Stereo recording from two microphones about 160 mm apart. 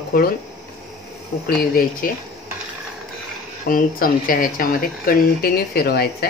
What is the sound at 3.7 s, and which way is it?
Speech, 65° left (ahead or behind).